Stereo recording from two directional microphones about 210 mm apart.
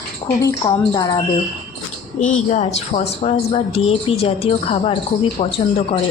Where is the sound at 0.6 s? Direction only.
20° left (ahead or behind).